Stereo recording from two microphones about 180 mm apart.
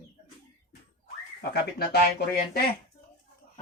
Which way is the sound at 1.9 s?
65° left (ahead or behind).